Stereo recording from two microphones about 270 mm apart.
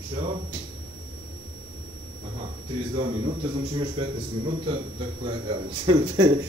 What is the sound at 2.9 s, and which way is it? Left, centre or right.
A man's voice, right.